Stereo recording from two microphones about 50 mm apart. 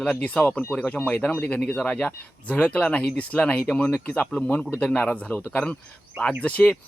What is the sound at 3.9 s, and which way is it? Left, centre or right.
Speech, left.